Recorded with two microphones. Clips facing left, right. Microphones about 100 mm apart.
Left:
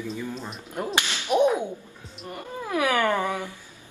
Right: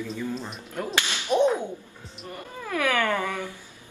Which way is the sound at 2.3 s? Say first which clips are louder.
Left 3 dB; 20° left (ahead or behind).